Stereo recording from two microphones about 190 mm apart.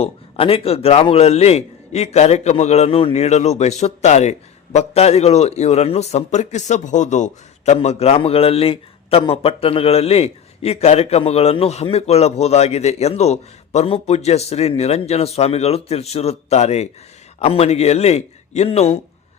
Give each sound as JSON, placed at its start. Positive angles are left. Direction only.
{"t": 0.0, "sound": "a man's voice", "side_deg": 30}